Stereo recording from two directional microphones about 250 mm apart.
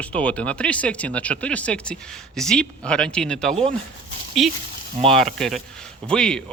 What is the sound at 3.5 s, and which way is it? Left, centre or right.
Speech, right.